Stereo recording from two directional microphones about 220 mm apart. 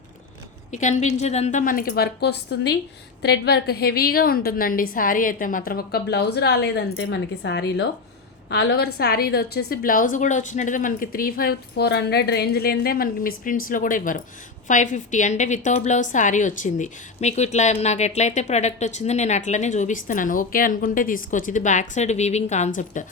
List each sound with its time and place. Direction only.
0.7 s a woman's voice: 35° left (ahead or behind)